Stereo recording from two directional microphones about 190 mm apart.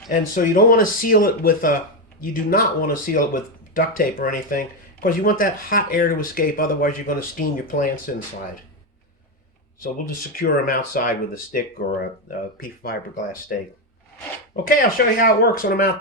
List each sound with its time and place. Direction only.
0.1 s speech: 45° left (ahead or behind)
9.8 s speech: 50° left (ahead or behind)
14.5 s speech: 50° left (ahead or behind)